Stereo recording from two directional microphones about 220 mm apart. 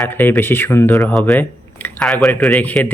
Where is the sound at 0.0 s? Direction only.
10° left (ahead or behind).